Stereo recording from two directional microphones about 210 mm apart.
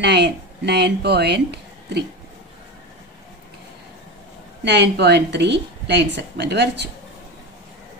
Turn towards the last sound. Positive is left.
turn(degrees=-55)  # may be behind; listen again after turning